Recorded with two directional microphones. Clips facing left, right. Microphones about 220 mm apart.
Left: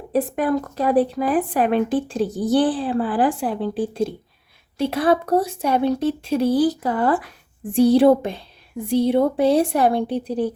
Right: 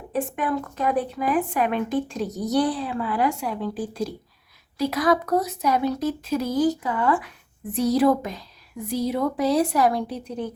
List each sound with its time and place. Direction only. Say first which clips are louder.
0.1 s speech: left 5 dB; 35° left (ahead or behind)